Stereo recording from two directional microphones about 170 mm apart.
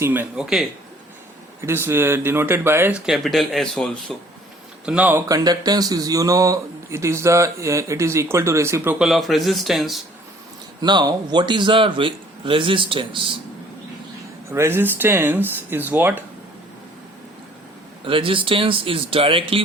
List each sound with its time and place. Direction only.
0.0 s speech: 10° right (ahead or behind)
1.6 s speech: 15° right (ahead or behind)
3.1 s speech: centre (ahead or behind)
4.9 s speech: 10° right (ahead or behind)
5.3 s speech: 20° right (ahead or behind); by 10.0 s centre (ahead or behind)
10.8 s a man's voice: 25° right (ahead or behind)
14.5 s speech: 15° right (ahead or behind)
18.0 s speech: 30° right (ahead or behind)